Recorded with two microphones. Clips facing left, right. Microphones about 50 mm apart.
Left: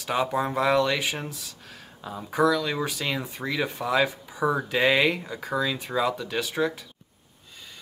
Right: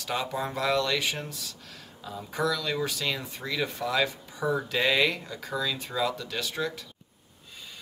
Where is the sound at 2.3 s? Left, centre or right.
Centre.